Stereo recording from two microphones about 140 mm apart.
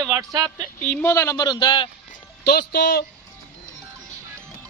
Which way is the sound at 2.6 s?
90° left.